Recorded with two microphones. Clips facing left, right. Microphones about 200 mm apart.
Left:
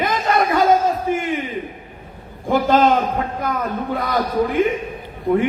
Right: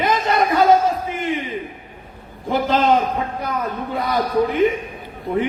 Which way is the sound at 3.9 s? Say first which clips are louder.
Right 2 dB; 50° left (ahead or behind).